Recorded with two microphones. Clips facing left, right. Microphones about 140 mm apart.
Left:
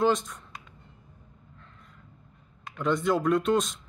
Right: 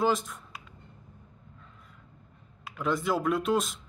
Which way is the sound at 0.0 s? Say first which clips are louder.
Left 2 dB; centre (ahead or behind).